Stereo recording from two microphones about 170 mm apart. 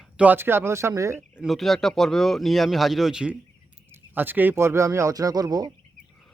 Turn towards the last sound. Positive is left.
turn(degrees=-25)  # may be behind; listen again after turning